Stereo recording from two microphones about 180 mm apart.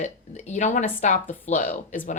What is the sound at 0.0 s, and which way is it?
A woman's voice, 40° left (ahead or behind).